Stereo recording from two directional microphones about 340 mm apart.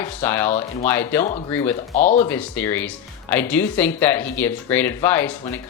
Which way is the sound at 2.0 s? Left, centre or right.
Left.